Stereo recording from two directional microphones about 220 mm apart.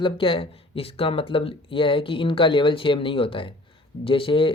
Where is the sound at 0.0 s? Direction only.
25° left (ahead or behind).